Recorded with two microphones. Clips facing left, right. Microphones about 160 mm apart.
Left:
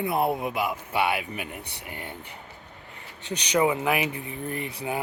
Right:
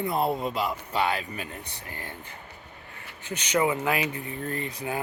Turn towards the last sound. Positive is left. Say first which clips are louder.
# even
turn(degrees=15)  # may be behind; listen again after turning